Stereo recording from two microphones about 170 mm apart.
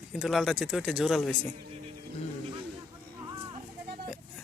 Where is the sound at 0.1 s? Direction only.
Centre (ahead or behind).